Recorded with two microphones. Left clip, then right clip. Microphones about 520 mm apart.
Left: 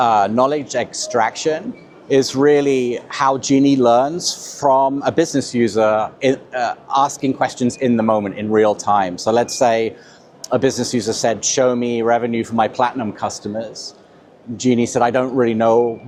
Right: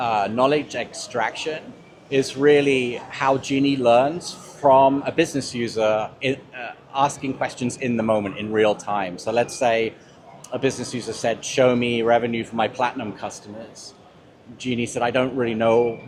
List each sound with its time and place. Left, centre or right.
0.0 s speech: left
14.6 s speech: left